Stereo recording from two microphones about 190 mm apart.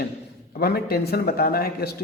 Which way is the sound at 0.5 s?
55° left (ahead or behind).